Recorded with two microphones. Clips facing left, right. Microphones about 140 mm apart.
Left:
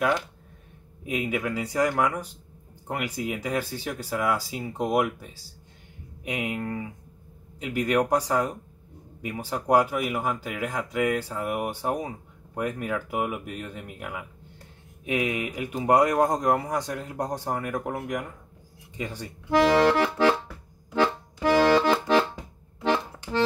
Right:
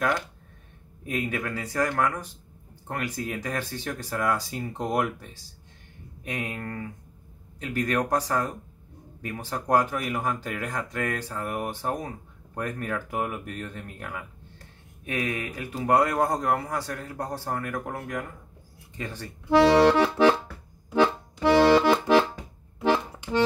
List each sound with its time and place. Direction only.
1.0 s speech: 15° left (ahead or behind)
6.2 s speech: 15° left (ahead or behind)
19.8 s accordion: 15° right (ahead or behind)
21.4 s accordion: 10° right (ahead or behind)